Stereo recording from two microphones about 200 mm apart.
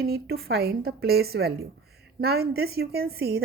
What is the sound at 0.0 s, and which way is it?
A woman's voice, 50° right (ahead or behind).